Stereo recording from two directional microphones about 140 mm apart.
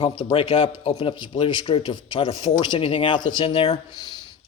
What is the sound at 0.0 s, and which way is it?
Speech, 35° left (ahead or behind).